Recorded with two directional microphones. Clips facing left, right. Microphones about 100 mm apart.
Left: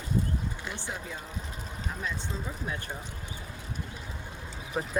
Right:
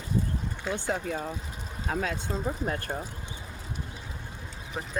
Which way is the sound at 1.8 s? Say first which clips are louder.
Right 6 dB; 90° right.